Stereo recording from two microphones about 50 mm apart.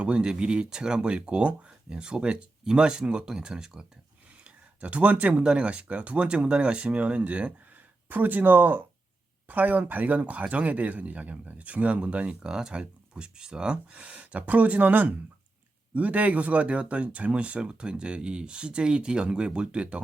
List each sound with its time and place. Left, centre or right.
0.0 s speech: right
4.4 s a sound: right
5.4 s speech: centre
12.5 s speech: centre